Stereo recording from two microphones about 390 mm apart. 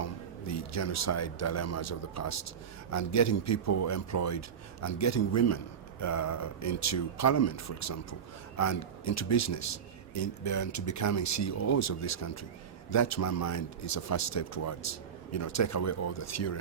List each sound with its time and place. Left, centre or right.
0.0 s a man's voice: left